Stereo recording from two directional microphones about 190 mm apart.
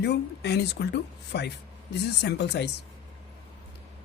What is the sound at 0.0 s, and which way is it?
Speech, 60° left (ahead or behind).